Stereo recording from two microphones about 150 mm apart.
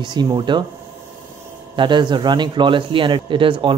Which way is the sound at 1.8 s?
30° right (ahead or behind).